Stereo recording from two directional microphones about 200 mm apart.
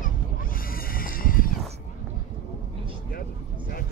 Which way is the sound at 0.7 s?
45° left (ahead or behind).